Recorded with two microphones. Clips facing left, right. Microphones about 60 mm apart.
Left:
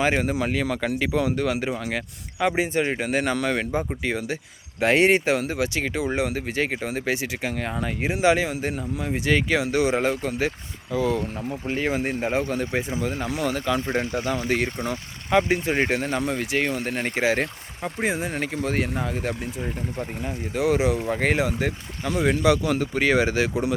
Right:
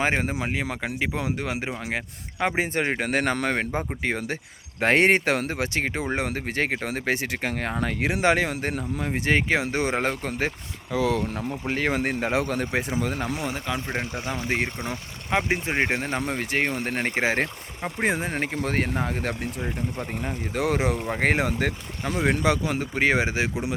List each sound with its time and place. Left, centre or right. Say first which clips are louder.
0.0 s speech: left 2 dB; right
0.3 s speech: left 4 dB; right
2.4 s speech: left 2 dB; right
8.2 s speech: left 2 dB; right
10.9 s speech: even; right
11.4 s speech: left 1 dB; right
12.5 s speech: even; right
13.4 s speech: left 5 dB; right
19.6 s speech: even; right
20.5 s speech: left 3 dB; right